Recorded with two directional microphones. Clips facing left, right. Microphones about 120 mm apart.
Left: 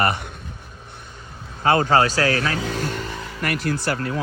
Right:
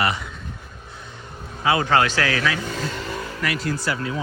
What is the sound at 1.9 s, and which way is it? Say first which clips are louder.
Speech: left 2 dB; 35° left (ahead or behind).